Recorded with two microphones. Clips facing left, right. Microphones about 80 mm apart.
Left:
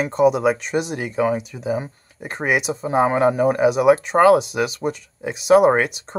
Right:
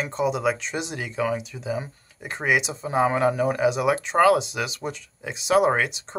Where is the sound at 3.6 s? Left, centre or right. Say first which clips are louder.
Left 9 dB; left.